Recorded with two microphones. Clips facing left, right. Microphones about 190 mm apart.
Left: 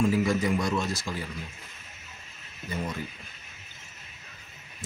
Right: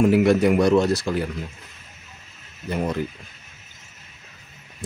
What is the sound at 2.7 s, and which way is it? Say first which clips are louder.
Speech: right 8 dB; 65° right (ahead or behind).